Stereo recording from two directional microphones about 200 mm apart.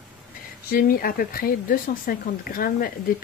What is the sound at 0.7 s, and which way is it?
Speech, 45° left (ahead or behind).